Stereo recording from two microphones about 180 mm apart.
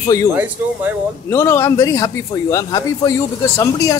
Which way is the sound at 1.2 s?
15° left (ahead or behind).